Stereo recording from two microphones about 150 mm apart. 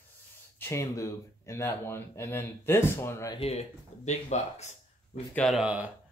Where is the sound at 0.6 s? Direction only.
20° left (ahead or behind).